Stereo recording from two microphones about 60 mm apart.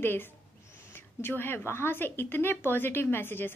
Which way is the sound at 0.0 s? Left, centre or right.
Left.